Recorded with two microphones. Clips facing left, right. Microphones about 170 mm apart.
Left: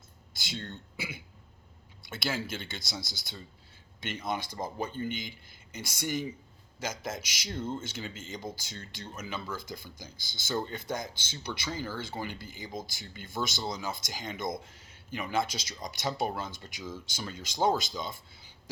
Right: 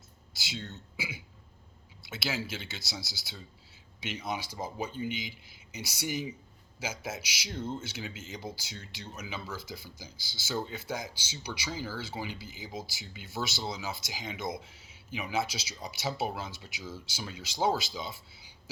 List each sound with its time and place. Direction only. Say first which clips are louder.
0.3 s speech: left 1 dB; 5° right (ahead or behind)
8.9 s speech: left 2 dB; 50° left (ahead or behind)
9.2 s speech: left 2 dB; 10° right (ahead or behind)